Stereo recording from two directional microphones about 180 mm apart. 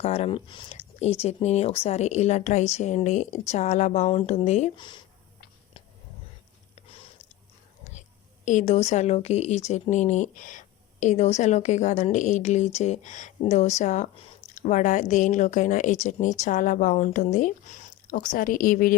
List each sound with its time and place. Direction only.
0.0 s speech: 35° left (ahead or behind)
4.8 s speech: 25° left (ahead or behind)
8.4 s speech: 40° left (ahead or behind)